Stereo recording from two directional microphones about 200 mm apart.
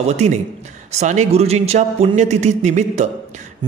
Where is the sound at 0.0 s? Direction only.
35° right (ahead or behind).